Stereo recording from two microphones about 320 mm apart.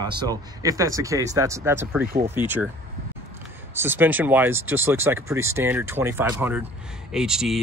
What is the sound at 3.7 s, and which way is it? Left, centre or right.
Speech, centre.